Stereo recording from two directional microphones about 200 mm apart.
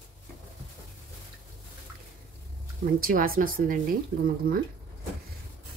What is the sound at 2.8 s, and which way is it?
Speech, 45° right (ahead or behind).